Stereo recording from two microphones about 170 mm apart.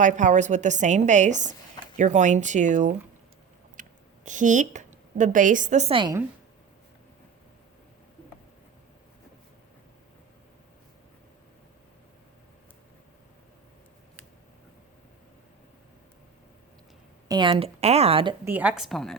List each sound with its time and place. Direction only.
0.0 s a woman's voice: 45° right (ahead or behind)
3.8 s a sound: 50° right (ahead or behind)
4.3 s a woman's voice: 50° right (ahead or behind); by 6.1 s 30° right (ahead or behind)
17.2 s speech: 25° right (ahead or behind)
18.4 s a woman's voice: 10° right (ahead or behind)